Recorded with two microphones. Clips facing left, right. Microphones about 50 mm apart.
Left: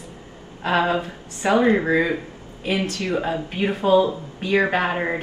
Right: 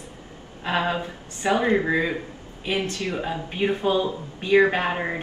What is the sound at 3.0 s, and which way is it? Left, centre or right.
Speech, left.